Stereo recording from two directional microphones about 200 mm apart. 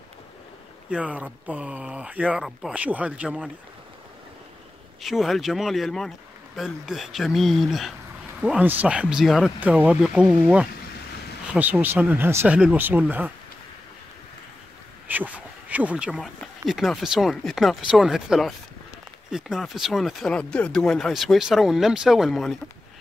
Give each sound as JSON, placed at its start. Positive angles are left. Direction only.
{"t": 0.8, "sound": "speech", "side_deg": -5}
{"t": 5.0, "sound": "speech", "side_deg": 0}
{"t": 15.0, "sound": "speech", "side_deg": -10}